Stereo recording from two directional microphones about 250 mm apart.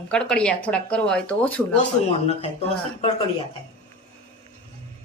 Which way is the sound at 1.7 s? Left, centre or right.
Left.